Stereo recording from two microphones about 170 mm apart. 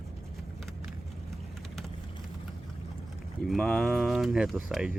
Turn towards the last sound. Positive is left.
turn(degrees=-5)  # may be behind; listen again after turning